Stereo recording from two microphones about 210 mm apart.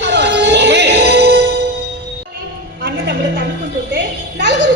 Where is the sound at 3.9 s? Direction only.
55° right (ahead or behind).